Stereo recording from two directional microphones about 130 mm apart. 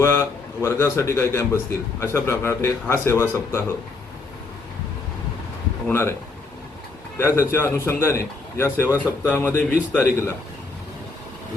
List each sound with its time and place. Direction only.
0.0 s a man's voice: 20° left (ahead or behind)
5.9 s a man's voice: 20° left (ahead or behind)
7.2 s a man's voice: 20° left (ahead or behind)